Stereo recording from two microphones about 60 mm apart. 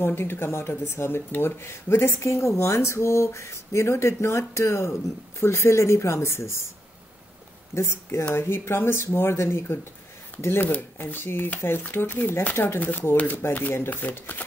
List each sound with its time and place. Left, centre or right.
0.0 s speech: left
7.7 s speech: left